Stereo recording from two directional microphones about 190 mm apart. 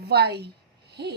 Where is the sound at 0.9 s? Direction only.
60° right (ahead or behind).